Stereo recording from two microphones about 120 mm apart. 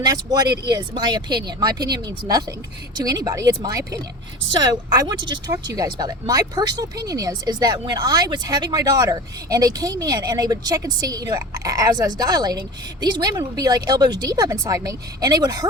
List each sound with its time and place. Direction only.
0.0 s speech: 30° right (ahead or behind)